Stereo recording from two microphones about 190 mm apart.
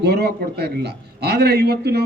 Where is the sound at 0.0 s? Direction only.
60° right (ahead or behind).